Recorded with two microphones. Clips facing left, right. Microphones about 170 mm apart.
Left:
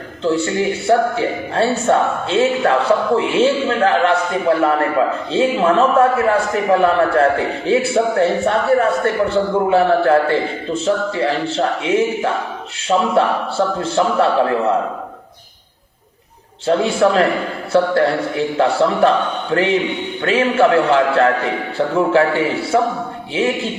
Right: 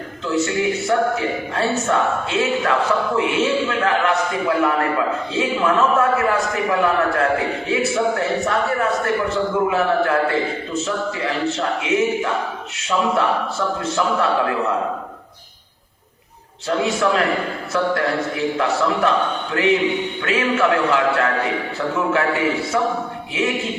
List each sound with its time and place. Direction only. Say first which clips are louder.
0.3 s a man's voice: left 3 dB; 30° left (ahead or behind)
16.6 s a man's voice: left 5 dB; 30° left (ahead or behind)